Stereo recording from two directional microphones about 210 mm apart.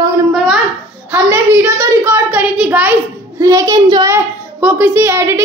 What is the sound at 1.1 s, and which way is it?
A woman's voice, 10° right (ahead or behind).